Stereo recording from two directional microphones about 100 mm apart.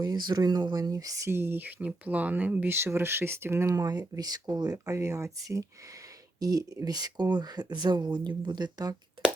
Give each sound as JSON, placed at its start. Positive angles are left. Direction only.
{"t": 0.0, "sound": "speech", "side_deg": -45}